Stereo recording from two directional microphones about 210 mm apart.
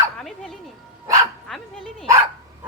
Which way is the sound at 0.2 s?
Centre (ahead or behind).